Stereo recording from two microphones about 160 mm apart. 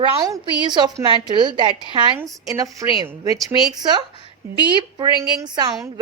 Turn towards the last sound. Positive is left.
turn(degrees=-25)  # may be behind; listen again after turning